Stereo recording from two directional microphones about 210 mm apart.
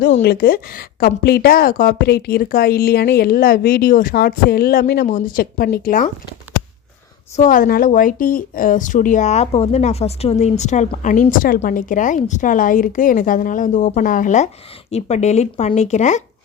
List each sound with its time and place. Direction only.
0.2 s a woman's voice: 45° left (ahead or behind)
7.3 s speech: 40° left (ahead or behind)